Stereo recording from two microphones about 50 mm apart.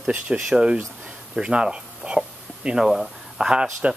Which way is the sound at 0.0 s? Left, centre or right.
Right.